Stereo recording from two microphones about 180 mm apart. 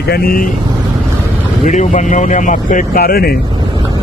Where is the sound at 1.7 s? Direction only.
45° left (ahead or behind).